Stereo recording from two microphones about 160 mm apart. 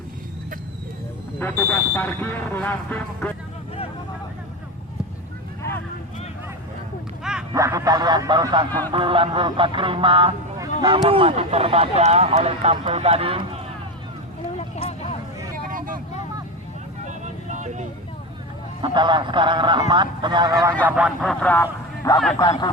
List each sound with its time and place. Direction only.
1.4 s speech: 10° left (ahead or behind)
7.5 s speech: 20° right (ahead or behind); by 13.4 s 35° right (ahead or behind)
14.4 s vehicle: 40° left (ahead or behind)
17.6 s vehicle: 50° right (ahead or behind)
18.8 s speech: 30° right (ahead or behind)
20.8 s speech: 5° right (ahead or behind); by 21.7 s 10° left (ahead or behind)
22.4 s speech: 25° left (ahead or behind)